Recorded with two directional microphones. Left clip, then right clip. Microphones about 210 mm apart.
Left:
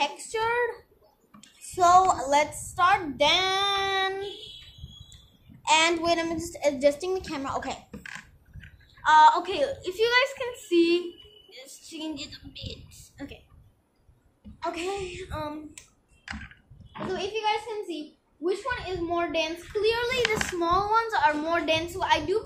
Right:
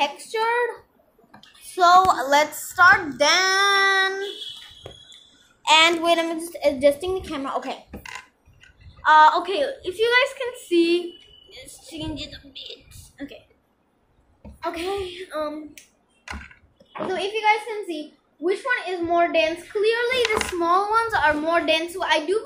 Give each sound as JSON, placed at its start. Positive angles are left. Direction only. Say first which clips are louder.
{"t": 0.0, "sound": "a sound", "louder": "right 4 dB", "side_deg": -15}
{"t": 2.1, "sound": "a woman's voice", "louder": "right 5 dB", "side_deg": -10}
{"t": 5.6, "sound": "a woman's voice", "louder": "right 6 dB", "side_deg": -10}
{"t": 9.0, "sound": "a woman's voice", "louder": "right 3 dB", "side_deg": -10}
{"t": 14.6, "sound": "a woman's voice", "louder": "right 4 dB", "side_deg": -10}
{"t": 16.9, "sound": "a woman's voice", "louder": "right 5 dB", "side_deg": -5}
{"t": 20.5, "sound": "a woman's voice", "louder": "right 4 dB", "side_deg": -15}